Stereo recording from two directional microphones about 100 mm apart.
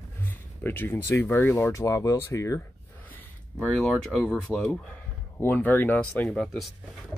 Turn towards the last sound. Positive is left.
turn(degrees=5)  # may be behind; listen again after turning